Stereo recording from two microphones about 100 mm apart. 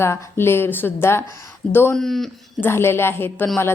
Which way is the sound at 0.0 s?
25° left (ahead or behind).